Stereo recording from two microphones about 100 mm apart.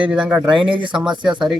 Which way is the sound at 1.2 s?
5° right (ahead or behind).